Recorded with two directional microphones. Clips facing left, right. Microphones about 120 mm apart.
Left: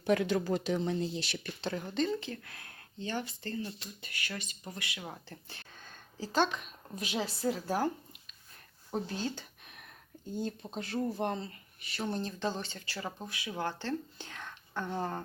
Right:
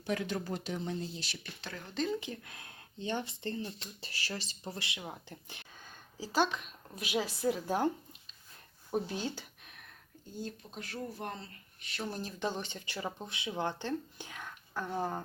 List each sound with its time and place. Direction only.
0.0 s speech: 65° left (ahead or behind)
2.2 s speech: 20° right (ahead or behind)
4.9 s speech: 15° right (ahead or behind)
8.9 s speech: 15° right (ahead or behind)
10.4 s speech: 30° left (ahead or behind)
11.8 s speech: centre (ahead or behind)